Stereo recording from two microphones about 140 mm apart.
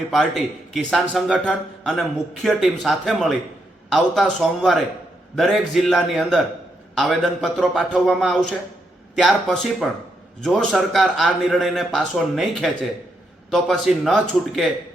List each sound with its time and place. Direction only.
0.1 s a man's voice: centre (ahead or behind)